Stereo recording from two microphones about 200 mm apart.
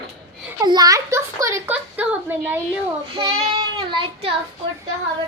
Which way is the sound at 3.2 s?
25° right (ahead or behind).